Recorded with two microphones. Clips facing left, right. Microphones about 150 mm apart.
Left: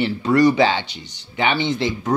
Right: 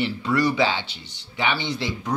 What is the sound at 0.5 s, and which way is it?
Speech, 60° left (ahead or behind).